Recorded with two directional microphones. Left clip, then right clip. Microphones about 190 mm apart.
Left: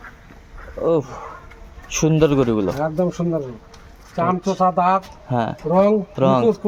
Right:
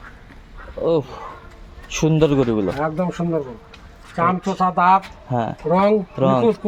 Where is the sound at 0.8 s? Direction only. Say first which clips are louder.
Even; centre (ahead or behind).